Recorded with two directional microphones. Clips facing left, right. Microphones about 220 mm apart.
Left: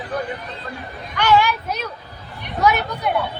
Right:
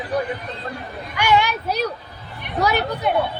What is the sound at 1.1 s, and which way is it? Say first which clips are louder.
Speech: left 2 dB; 15° right (ahead or behind).